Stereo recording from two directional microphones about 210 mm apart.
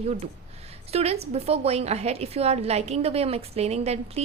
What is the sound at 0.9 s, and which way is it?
A woman's voice, 30° right (ahead or behind).